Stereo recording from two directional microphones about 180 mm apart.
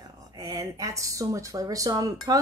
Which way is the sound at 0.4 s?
20° right (ahead or behind).